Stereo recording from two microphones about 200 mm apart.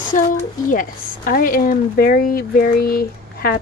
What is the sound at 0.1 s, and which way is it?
A woman's voice, 40° left (ahead or behind).